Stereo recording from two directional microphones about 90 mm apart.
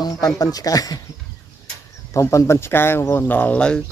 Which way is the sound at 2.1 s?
35° left (ahead or behind).